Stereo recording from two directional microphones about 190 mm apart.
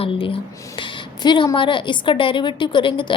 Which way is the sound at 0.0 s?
30° left (ahead or behind).